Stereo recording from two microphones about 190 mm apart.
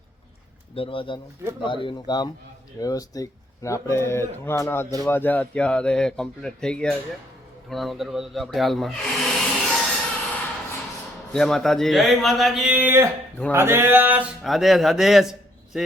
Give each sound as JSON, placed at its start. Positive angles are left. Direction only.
{"t": 0.8, "sound": "speech", "side_deg": 25}
{"t": 11.3, "sound": "speech", "side_deg": 0}